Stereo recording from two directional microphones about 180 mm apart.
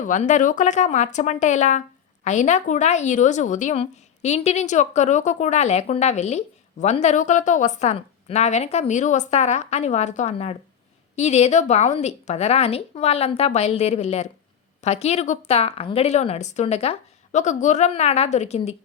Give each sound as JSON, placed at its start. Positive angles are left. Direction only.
{"t": 0.0, "sound": "a woman's voice", "side_deg": 45}